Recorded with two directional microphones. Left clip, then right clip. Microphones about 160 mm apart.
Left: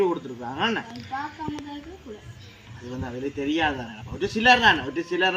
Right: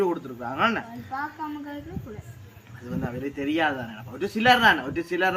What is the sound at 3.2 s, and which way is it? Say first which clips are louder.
A man's voice: left 1 dB; 20° right (ahead or behind).